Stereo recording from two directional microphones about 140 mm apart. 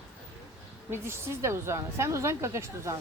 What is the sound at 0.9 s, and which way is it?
A woman's voice, 15° right (ahead or behind).